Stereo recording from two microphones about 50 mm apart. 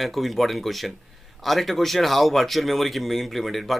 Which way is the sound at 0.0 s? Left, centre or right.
Centre.